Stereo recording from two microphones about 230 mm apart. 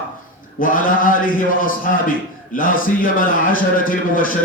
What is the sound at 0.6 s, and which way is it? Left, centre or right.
A man's voice, left.